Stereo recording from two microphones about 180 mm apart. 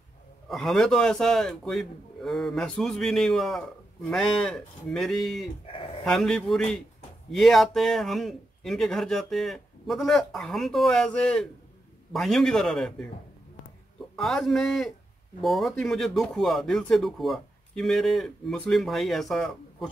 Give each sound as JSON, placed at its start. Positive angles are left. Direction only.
{"t": 0.5, "sound": "a man's voice", "side_deg": 0}
{"t": 5.7, "sound": "a sound", "side_deg": 30}
{"t": 6.0, "sound": "a man's voice", "side_deg": 0}
{"t": 14.1, "sound": "a man's voice", "side_deg": 0}